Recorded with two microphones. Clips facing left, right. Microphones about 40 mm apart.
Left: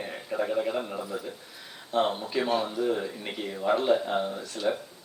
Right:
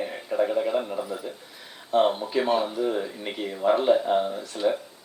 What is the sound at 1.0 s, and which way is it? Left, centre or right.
Speech, centre.